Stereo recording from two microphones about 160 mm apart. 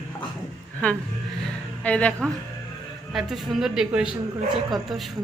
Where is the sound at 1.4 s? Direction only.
10° left (ahead or behind).